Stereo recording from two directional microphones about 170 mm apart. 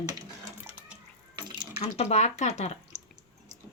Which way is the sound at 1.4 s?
25° right (ahead or behind).